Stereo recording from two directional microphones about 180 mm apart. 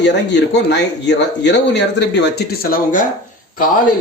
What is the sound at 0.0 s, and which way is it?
Speech, 75° left (ahead or behind).